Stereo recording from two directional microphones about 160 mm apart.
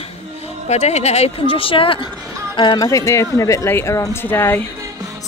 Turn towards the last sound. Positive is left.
turn(degrees=-20)  # may be behind; listen again after turning